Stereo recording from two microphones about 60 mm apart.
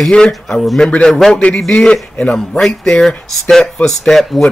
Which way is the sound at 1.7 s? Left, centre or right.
Centre.